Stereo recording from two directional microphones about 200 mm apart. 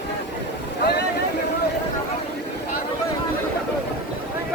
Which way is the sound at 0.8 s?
55° left (ahead or behind).